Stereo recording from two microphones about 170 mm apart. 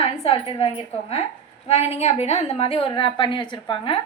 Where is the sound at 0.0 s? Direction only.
35° left (ahead or behind).